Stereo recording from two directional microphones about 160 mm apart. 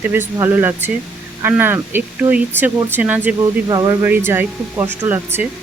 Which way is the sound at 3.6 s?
25° right (ahead or behind).